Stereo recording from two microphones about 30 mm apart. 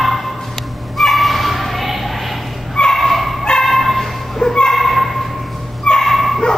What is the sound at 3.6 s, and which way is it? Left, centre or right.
Bow-wow, centre.